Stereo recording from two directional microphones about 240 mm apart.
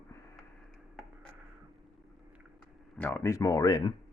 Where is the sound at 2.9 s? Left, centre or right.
Centre.